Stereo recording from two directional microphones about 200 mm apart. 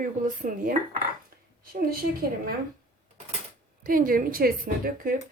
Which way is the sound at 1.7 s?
45° right (ahead or behind).